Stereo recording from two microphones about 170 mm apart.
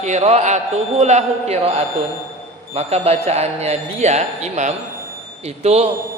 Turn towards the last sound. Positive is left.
turn(degrees=-40)  # may be behind; listen again after turning